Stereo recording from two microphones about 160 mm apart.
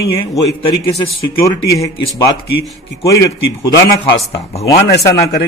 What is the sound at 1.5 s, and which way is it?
Speech, 20° left (ahead or behind).